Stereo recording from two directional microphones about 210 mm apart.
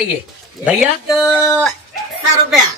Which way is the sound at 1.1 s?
Centre (ahead or behind).